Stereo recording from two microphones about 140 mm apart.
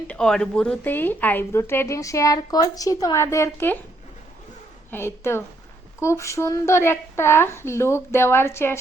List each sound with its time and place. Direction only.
0.1 s a woman's voice: 5° left (ahead or behind)
4.9 s a woman's voice: 15° left (ahead or behind)